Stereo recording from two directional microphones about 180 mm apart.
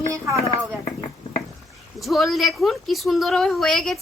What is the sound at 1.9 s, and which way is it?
A woman's voice, centre (ahead or behind).